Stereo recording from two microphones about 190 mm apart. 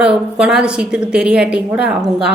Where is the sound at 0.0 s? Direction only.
5° right (ahead or behind).